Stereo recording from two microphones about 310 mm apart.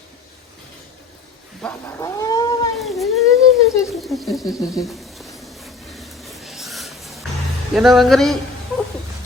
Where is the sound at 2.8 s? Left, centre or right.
Centre.